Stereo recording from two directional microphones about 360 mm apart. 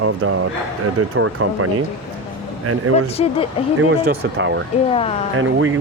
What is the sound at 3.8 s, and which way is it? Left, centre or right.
Speech, right.